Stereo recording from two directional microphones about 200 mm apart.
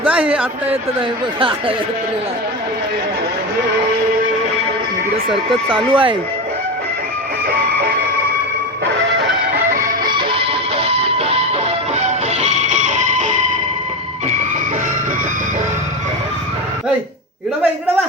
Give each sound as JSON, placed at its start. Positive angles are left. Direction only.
{"t": 1.4, "sound": "speech", "side_deg": -25}
{"t": 5.3, "sound": "speech", "side_deg": -25}
{"t": 9.8, "sound": "music", "side_deg": -20}